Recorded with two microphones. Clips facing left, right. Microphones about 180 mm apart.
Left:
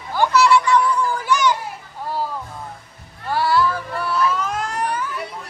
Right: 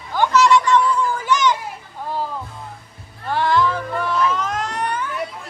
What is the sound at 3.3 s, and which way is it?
Cat, 5° left (ahead or behind).